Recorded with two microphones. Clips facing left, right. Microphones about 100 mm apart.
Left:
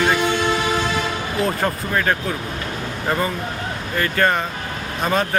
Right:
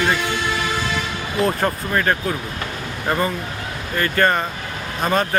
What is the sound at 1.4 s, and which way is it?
Speech, centre (ahead or behind).